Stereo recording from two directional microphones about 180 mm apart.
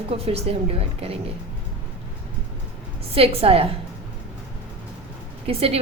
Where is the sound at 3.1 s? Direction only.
30° right (ahead or behind).